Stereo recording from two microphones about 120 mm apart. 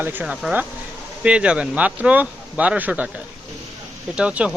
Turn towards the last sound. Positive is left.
turn(degrees=-10)  # may be behind; listen again after turning